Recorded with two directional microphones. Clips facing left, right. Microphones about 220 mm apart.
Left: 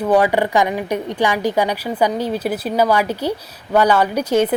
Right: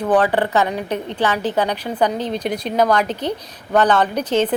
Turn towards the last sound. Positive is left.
turn(degrees=10)  # may be behind; listen again after turning